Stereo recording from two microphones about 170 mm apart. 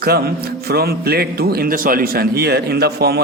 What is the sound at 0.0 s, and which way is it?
A man's voice, 65° right (ahead or behind).